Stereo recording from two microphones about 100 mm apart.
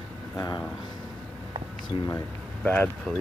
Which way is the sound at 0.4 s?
45° left (ahead or behind).